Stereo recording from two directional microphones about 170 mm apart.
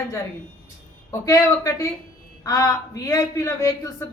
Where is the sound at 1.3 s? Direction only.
20° left (ahead or behind).